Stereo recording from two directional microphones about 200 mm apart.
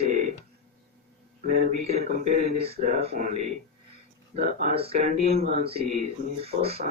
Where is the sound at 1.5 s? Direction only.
40° right (ahead or behind).